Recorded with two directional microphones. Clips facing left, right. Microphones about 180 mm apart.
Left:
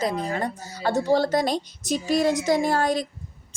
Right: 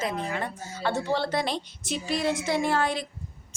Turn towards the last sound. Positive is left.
turn(degrees=40)  # may be behind; listen again after turning